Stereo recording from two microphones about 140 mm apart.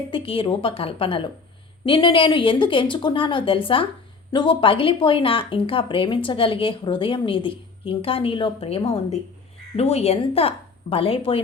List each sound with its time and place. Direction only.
0.1 s speech: 40° left (ahead or behind)